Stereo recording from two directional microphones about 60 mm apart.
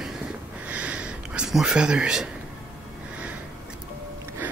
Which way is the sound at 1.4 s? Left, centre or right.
Centre.